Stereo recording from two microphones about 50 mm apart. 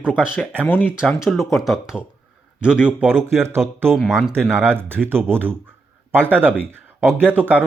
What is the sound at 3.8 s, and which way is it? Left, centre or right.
Speech, centre.